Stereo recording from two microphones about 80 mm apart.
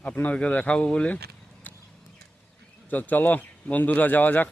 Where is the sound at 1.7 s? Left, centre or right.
Left.